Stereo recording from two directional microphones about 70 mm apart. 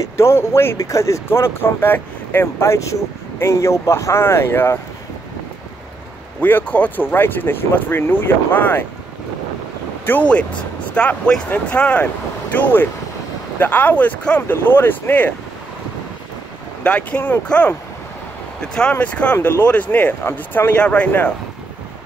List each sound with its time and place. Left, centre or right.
0.2 s speech: left
0.7 s speech: left
2.4 s speech: left
6.4 s speech: left
10.1 s speech: left
11.0 s speech: centre
14.5 s speech: left
16.8 s speech: centre
18.8 s speech: centre
20.8 s speech: centre